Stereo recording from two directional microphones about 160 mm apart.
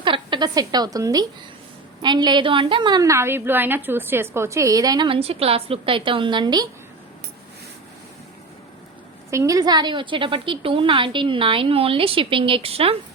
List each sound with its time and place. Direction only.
0.0 s a woman's voice: 30° right (ahead or behind)
9.3 s a woman's voice: 20° right (ahead or behind); by 13.0 s 35° right (ahead or behind)